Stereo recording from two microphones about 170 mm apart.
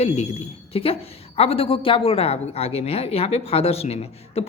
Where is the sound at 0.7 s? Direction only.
35° left (ahead or behind).